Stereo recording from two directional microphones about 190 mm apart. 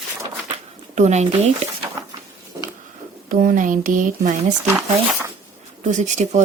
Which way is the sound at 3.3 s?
45° right (ahead or behind).